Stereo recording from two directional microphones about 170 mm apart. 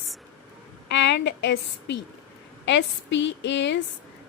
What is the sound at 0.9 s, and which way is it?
A woman's voice, 90° left.